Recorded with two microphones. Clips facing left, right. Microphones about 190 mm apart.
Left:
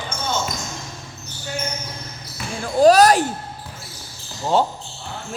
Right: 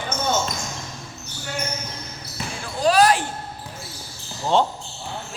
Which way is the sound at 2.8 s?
40° left (ahead or behind).